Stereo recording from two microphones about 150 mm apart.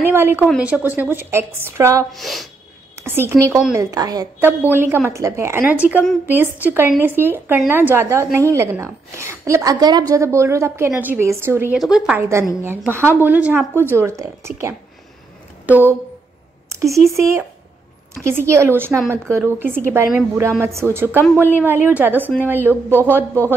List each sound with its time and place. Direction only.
0.0 s a woman's voice: 15° right (ahead or behind)
2.1 s speech: centre (ahead or behind)
3.0 s a woman's voice: 15° right (ahead or behind)
4.4 s a woman's voice: 15° right (ahead or behind)
11.7 s speech: 5° right (ahead or behind)
12.2 s a woman's voice: 20° right (ahead or behind)
16.6 s a sound: 20° right (ahead or behind)
17.1 s a woman's voice: 20° right (ahead or behind)